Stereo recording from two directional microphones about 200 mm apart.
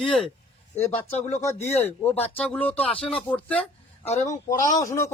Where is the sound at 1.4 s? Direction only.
15° left (ahead or behind).